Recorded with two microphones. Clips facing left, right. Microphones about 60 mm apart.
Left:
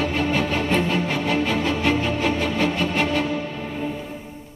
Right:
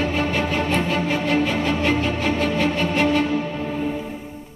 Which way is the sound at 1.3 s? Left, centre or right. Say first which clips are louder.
Right 1 dB; centre.